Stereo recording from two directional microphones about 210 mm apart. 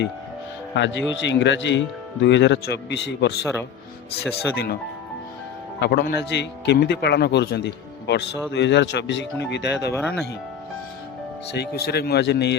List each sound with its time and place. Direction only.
0.8 s a man's voice: 60° left (ahead or behind)
4.5 s speech: 50° left (ahead or behind)
5.8 s a man's voice: 50° left (ahead or behind)
9.9 s speech: 5° left (ahead or behind)
11.5 s speech: 50° left (ahead or behind)